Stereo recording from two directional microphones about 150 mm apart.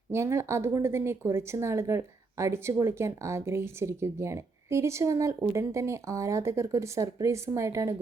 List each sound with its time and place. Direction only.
0.1 s speech: 20° right (ahead or behind)